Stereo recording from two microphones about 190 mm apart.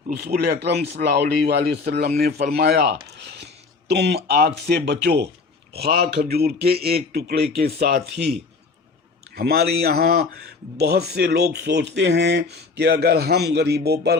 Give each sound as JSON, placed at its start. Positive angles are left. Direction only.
{"t": 0.1, "sound": "speech", "side_deg": -55}
{"t": 9.3, "sound": "speech", "side_deg": -55}